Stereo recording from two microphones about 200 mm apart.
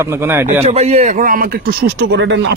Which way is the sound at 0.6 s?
30° right (ahead or behind).